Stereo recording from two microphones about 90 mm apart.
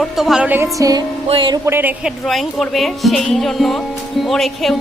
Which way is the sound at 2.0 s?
Centre (ahead or behind).